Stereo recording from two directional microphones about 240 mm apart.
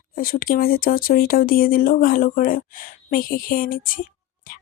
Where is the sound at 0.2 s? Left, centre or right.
Left.